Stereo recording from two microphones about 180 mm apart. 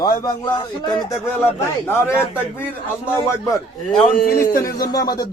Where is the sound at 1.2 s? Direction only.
10° left (ahead or behind).